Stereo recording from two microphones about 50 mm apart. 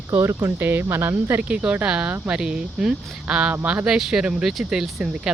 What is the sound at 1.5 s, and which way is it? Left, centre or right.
Speech, right.